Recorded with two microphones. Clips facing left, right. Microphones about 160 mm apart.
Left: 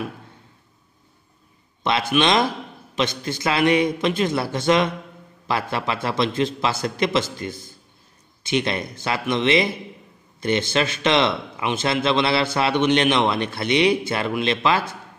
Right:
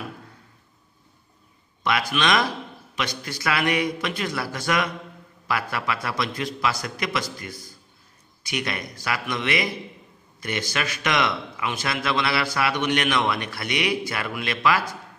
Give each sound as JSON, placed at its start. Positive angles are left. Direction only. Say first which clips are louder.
{"t": 1.8, "sound": "speech", "louder": "left 4 dB", "side_deg": 25}